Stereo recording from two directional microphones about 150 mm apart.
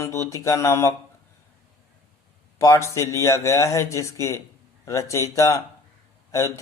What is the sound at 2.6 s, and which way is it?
Speech, 20° left (ahead or behind).